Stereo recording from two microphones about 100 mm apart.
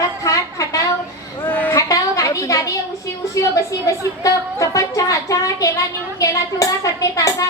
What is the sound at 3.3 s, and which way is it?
Speech, 35° left (ahead or behind).